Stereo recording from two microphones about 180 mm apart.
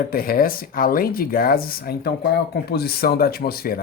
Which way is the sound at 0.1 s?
55° left (ahead or behind).